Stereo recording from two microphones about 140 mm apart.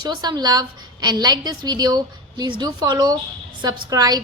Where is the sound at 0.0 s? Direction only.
30° right (ahead or behind).